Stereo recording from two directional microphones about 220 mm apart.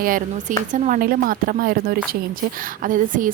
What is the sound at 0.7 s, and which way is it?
A woman's voice, 40° right (ahead or behind).